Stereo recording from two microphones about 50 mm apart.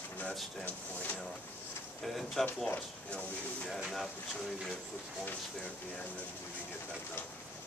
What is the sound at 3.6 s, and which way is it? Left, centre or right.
Speech, centre.